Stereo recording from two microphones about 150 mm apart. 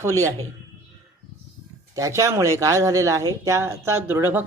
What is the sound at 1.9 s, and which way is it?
Speech, 20° right (ahead or behind).